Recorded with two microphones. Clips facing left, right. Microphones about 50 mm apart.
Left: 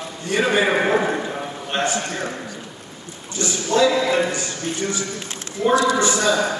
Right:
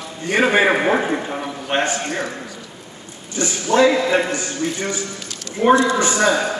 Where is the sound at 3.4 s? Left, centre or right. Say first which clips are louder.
Right 3 dB; right.